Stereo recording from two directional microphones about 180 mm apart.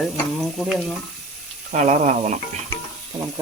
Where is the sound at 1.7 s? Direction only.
40° right (ahead or behind).